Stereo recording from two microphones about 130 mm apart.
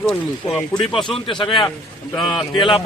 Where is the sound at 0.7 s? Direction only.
25° left (ahead or behind).